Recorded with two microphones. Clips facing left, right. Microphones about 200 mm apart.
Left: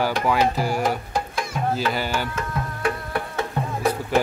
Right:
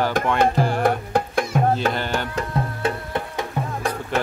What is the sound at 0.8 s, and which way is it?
Music, 60° right (ahead or behind).